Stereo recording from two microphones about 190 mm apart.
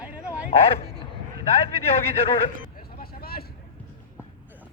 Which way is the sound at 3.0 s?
55° left (ahead or behind).